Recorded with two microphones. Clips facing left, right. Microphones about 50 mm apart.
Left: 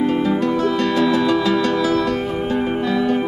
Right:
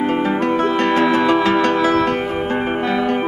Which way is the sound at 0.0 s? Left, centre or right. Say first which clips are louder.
Even; right.